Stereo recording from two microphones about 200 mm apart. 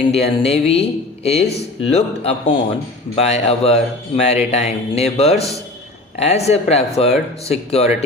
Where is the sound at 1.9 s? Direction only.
30° left (ahead or behind).